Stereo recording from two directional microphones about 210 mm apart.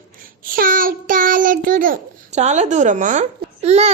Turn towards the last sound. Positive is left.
turn(degrees=-30)  # may be behind; listen again after turning